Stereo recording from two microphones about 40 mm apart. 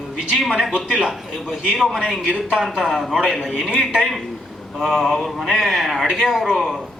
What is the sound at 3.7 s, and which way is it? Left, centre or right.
Speech, centre.